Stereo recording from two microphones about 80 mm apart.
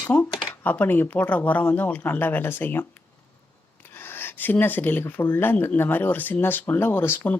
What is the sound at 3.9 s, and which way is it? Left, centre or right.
Speech, left.